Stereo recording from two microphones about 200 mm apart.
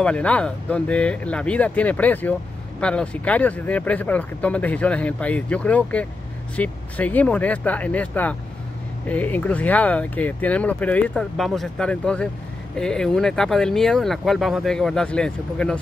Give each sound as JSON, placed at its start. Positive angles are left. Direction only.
{"t": 0.0, "sound": "speech", "side_deg": 5}